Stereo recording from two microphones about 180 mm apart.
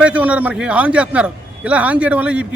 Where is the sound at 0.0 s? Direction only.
5° right (ahead or behind).